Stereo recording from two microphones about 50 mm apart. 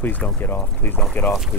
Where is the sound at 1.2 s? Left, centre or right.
Left.